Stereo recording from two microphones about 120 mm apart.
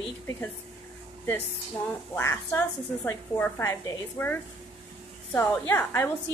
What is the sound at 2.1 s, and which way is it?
A woman's voice, 20° left (ahead or behind).